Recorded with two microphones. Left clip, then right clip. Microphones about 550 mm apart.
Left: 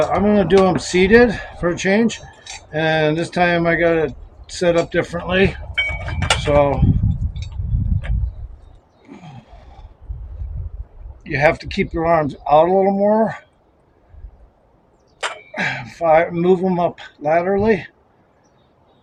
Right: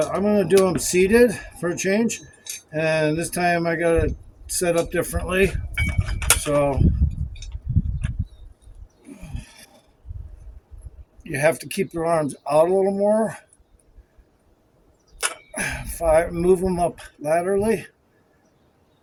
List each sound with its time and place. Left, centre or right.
0.1 s speech: right
11.3 s speech: right
15.5 s speech: right